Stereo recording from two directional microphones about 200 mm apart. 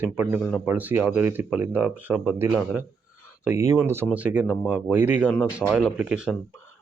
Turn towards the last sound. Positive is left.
turn(degrees=-5)  # may be behind; listen again after turning